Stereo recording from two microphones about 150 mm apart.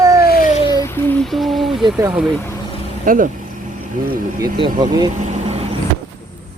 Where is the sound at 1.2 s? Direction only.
Centre (ahead or behind).